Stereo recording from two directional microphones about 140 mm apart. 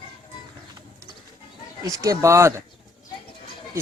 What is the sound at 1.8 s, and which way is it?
Speech, 25° right (ahead or behind).